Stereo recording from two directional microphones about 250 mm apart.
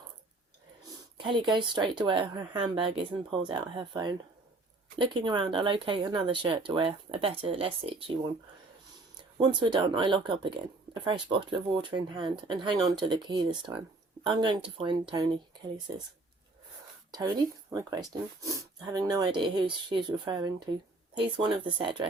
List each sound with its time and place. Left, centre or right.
1.2 s speech: centre
9.4 s speech: centre
17.1 s speech: centre